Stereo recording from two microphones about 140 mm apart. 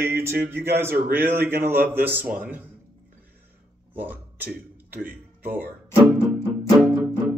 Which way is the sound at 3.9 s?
15° right (ahead or behind).